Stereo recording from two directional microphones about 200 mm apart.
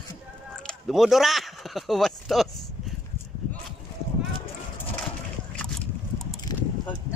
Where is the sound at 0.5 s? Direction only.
Centre (ahead or behind).